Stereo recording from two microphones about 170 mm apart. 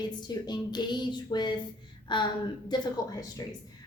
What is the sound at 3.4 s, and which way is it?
Speech, 20° left (ahead or behind).